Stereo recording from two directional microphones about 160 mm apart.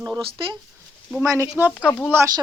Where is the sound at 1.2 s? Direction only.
20° right (ahead or behind).